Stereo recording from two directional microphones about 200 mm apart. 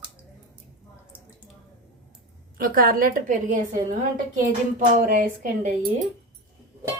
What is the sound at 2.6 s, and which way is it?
Speech, 45° right (ahead or behind).